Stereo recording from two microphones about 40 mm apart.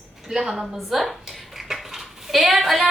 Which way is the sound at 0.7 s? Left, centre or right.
Centre.